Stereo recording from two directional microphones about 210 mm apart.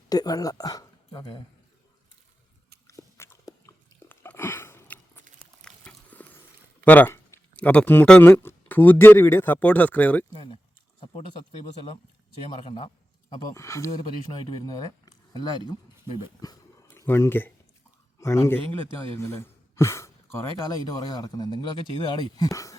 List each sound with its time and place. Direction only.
0.1 s speech: 15° left (ahead or behind)
2.8 s biting: 15° left (ahead or behind)
5.6 s a sound: 5° left (ahead or behind)
6.8 s speech: 10° left (ahead or behind)
10.3 s a man's voice: 20° left (ahead or behind)
12.5 s a man's voice: 25° left (ahead or behind)
13.3 s speech: 15° left (ahead or behind)